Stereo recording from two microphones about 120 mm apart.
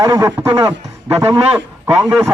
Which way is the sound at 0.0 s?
30° right (ahead or behind).